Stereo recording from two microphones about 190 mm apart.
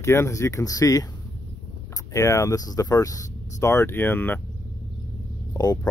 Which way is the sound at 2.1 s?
15° left (ahead or behind).